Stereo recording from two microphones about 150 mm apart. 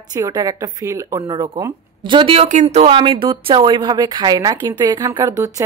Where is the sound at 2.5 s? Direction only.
50° right (ahead or behind).